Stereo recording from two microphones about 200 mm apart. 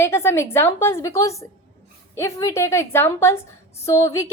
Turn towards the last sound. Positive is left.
turn(degrees=15)  # may be behind; listen again after turning